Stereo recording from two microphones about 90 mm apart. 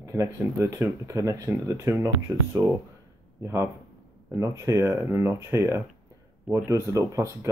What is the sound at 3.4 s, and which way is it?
Speech, 35° right (ahead or behind).